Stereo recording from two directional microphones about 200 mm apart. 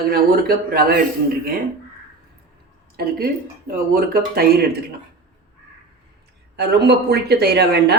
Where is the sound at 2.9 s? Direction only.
50° right (ahead or behind).